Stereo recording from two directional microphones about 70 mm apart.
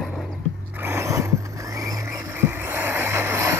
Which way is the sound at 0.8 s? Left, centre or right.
Right.